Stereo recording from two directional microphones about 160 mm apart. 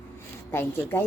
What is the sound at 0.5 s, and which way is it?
Speech, 15° left (ahead or behind).